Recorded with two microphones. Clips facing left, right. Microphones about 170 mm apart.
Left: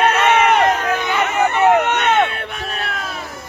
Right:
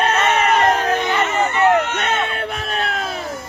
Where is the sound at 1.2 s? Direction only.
65° left (ahead or behind).